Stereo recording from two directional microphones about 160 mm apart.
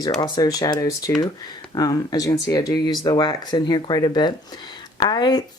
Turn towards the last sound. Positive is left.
turn(degrees=25)  # may be behind; listen again after turning